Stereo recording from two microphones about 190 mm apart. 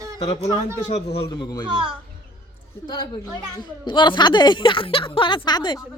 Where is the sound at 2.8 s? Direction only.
20° left (ahead or behind).